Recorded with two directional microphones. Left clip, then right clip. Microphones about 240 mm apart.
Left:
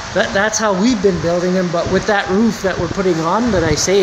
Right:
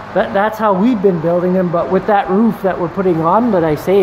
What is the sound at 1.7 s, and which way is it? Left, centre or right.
Speech, centre.